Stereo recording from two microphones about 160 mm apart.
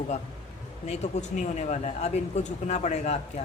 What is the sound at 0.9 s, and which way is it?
Speech, 45° left (ahead or behind).